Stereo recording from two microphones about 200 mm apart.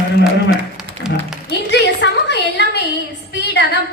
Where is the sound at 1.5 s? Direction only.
60° left (ahead or behind).